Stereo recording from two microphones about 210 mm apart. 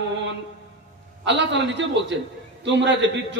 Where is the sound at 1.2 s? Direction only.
60° right (ahead or behind).